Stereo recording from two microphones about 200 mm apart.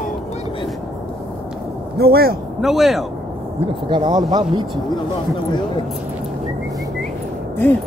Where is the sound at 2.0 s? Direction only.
50° right (ahead or behind).